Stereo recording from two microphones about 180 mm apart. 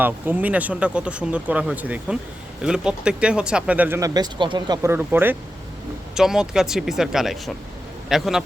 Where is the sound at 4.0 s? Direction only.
20° right (ahead or behind).